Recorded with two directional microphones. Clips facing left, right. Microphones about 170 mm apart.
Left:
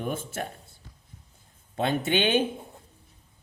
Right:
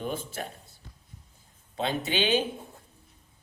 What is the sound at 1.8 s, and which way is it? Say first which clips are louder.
Speech: left 3 dB; 50° left (ahead or behind).